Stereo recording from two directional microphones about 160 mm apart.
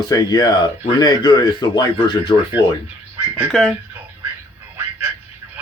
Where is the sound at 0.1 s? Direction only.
25° left (ahead or behind).